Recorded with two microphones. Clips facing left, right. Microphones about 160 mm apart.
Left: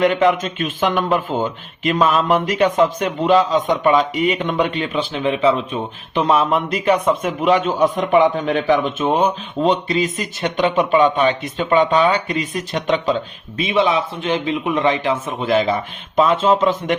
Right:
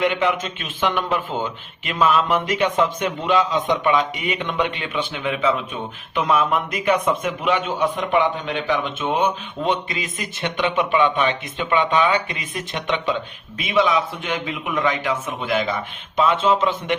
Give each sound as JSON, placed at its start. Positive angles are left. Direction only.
{"t": 0.0, "sound": "a man's voice", "side_deg": 40}